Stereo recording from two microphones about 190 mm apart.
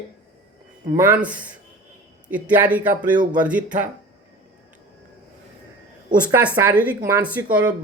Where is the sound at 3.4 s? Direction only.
5° right (ahead or behind).